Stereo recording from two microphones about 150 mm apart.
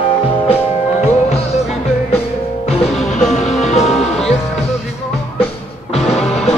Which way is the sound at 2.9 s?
5° left (ahead or behind).